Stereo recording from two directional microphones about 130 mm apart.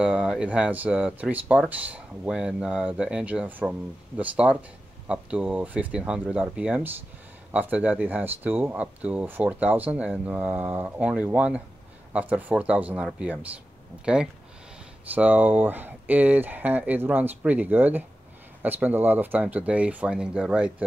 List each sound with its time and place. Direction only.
0.0 s speech: 5° right (ahead or behind)